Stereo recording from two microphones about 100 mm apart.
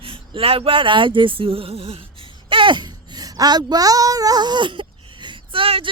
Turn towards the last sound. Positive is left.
turn(degrees=-65)  # may be behind; listen again after turning